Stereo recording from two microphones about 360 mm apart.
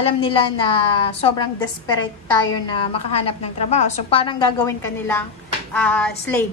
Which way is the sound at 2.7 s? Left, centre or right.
Centre.